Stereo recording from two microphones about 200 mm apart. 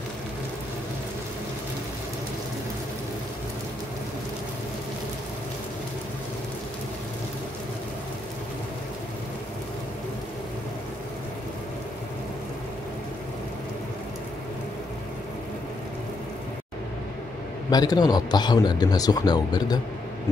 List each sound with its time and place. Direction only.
17.6 s a man's voice: 20° left (ahead or behind)